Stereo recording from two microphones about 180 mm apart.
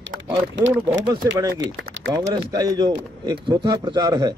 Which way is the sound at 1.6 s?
90° right.